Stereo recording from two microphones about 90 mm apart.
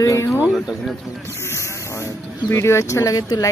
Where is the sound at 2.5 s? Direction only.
30° left (ahead or behind).